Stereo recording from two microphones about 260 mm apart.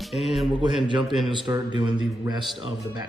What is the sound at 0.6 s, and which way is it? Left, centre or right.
Speech, centre.